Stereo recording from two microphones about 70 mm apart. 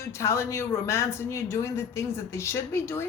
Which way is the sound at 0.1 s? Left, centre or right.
Left.